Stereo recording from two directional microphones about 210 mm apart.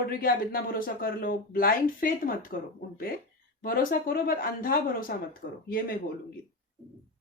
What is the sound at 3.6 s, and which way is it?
A man's voice, 45° left (ahead or behind).